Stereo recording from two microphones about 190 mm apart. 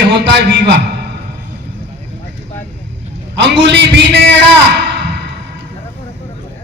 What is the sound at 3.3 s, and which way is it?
A man's voice, 65° right (ahead or behind).